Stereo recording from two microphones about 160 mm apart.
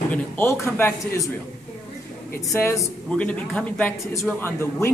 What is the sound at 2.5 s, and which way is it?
Speech, 15° left (ahead or behind).